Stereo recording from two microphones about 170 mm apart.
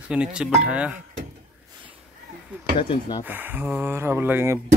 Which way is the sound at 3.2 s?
10° right (ahead or behind).